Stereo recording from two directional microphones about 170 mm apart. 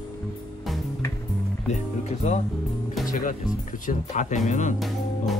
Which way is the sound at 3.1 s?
50° left (ahead or behind).